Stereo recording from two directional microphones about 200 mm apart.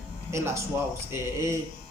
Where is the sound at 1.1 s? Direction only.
15° right (ahead or behind).